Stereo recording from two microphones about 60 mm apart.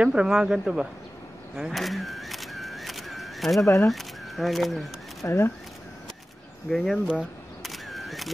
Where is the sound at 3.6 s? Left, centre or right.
Left.